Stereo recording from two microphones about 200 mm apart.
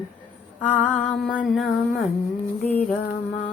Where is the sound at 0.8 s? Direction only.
5° left (ahead or behind).